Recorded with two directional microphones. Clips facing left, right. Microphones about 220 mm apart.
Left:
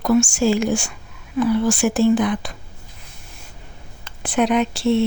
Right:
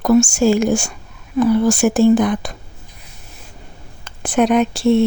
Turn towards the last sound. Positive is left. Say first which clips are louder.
# right 4 dB
turn(degrees=-45)  # may be behind; listen again after turning